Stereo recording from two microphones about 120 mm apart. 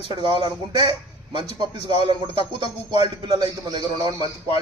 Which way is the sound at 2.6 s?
40° right (ahead or behind).